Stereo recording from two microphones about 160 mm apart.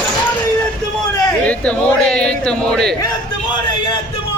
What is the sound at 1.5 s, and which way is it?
A man's voice, 10° left (ahead or behind).